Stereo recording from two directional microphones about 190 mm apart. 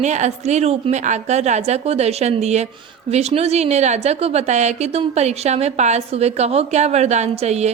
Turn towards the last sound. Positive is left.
turn(degrees=-35)  # may be behind; listen again after turning